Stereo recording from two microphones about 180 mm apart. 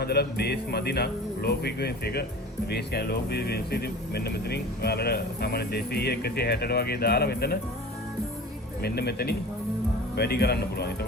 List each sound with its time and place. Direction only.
0.0 s speech: 65° left (ahead or behind)
8.8 s speech: 65° left (ahead or behind)